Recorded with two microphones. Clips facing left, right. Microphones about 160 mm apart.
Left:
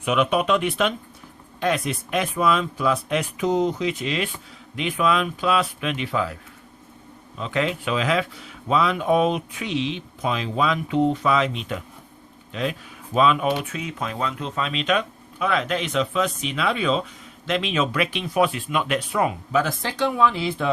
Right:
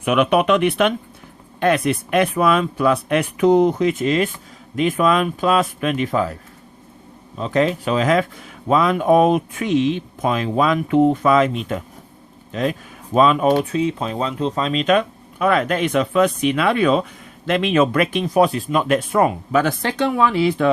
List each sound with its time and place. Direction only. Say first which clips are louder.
0.0 s speech: right 5 dB; 60° right (ahead or behind); by 6.3 s 45° right (ahead or behind)
7.3 s speech: right 6 dB; 40° right (ahead or behind)
13.1 s speech: right 5 dB; 40° right (ahead or behind)
19.5 s speech: right 4 dB; 65° right (ahead or behind)